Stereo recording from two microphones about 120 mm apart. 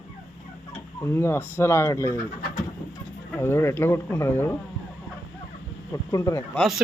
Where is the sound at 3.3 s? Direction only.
20° left (ahead or behind).